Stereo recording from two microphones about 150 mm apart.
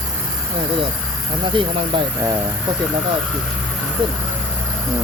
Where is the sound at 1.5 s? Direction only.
35° right (ahead or behind).